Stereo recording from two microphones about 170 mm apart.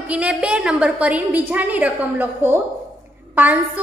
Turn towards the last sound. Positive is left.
turn(degrees=-10)  # may be behind; listen again after turning